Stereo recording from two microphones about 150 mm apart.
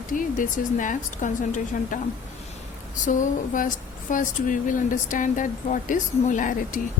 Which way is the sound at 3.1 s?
60° left (ahead or behind).